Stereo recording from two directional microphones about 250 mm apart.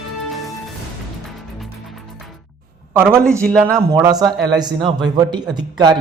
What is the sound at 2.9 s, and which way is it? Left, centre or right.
Speech, centre.